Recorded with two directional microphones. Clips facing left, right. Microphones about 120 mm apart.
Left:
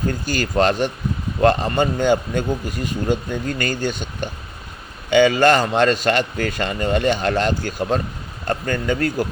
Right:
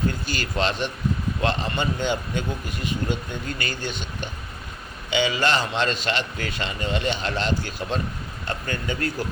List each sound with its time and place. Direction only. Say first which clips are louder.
0.1 s speech: left 7 dB; 45° left (ahead or behind)